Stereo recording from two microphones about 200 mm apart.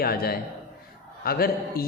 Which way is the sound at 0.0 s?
50° left (ahead or behind).